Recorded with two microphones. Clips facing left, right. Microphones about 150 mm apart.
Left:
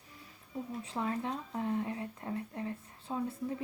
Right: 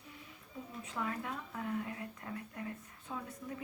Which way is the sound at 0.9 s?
30° left (ahead or behind).